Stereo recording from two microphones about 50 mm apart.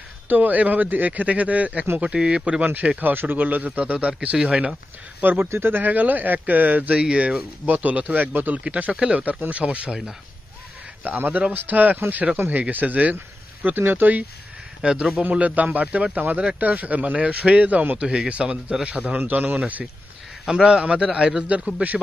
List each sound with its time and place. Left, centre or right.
0.3 s speech: right; by 2.6 s centre
2.6 s speech: right
5.4 s speech: right
7.0 s speech: right
8.9 s speech: centre
11.1 s speech: right
13.7 s speech: right
14.8 s speech: centre
15.3 s speech: right
17.9 s a man's voice: centre; by 19.8 s right
20.4 s speech: centre